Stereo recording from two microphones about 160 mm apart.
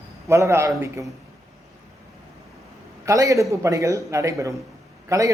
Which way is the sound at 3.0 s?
20° right (ahead or behind).